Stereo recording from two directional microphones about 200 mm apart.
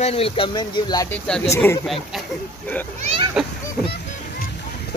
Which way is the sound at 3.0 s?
30° right (ahead or behind).